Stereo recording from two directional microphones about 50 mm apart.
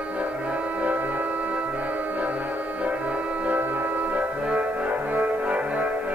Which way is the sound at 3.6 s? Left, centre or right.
Right.